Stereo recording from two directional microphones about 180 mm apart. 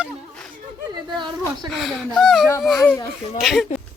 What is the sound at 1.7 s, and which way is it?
A woman's voice, centre (ahead or behind).